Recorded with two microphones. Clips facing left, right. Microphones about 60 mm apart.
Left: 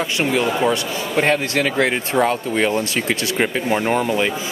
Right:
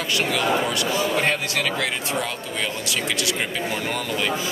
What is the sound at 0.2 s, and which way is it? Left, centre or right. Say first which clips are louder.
Speech: left 4 dB; left.